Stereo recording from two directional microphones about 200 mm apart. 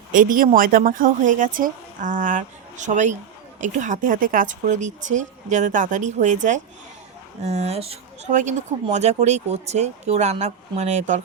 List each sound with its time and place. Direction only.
0.1 s speech: 45° right (ahead or behind)